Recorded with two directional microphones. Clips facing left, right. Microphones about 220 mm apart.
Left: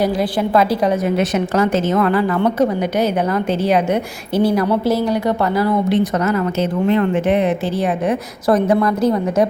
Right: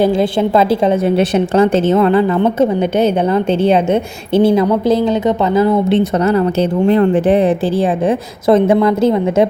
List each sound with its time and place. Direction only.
0.0 s a woman's voice: 25° right (ahead or behind)